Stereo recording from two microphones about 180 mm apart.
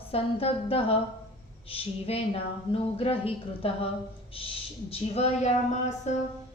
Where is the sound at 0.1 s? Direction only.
30° left (ahead or behind).